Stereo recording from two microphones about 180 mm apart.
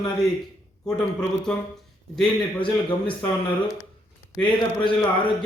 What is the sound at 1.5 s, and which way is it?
Speech, 5° left (ahead or behind).